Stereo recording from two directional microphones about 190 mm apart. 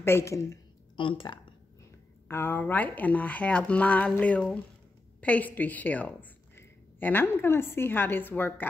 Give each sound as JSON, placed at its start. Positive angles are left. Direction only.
{"t": 0.0, "sound": "a sound", "side_deg": 15}
{"t": 1.0, "sound": "speech", "side_deg": 25}
{"t": 2.2, "sound": "a woman's voice", "side_deg": 10}